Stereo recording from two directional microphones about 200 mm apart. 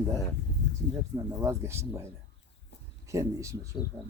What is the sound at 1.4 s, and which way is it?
Speech, 15° right (ahead or behind).